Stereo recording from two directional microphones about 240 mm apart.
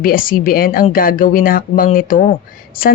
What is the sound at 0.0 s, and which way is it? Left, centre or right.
A woman's voice, left.